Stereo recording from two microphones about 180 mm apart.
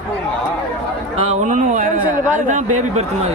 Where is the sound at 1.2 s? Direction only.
35° right (ahead or behind).